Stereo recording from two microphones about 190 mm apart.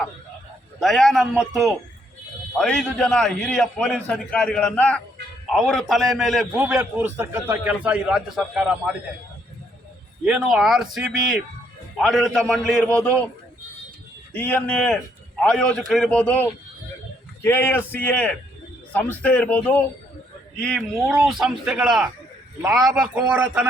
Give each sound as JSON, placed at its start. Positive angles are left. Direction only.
{"t": 0.8, "sound": "a man's voice", "side_deg": 0}
{"t": 10.2, "sound": "a man's voice", "side_deg": -5}
{"t": 14.3, "sound": "a man's voice", "side_deg": 10}
{"t": 22.6, "sound": "speech", "side_deg": -15}